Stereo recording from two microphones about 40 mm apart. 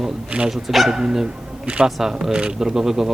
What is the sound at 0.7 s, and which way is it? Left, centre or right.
Speech, centre.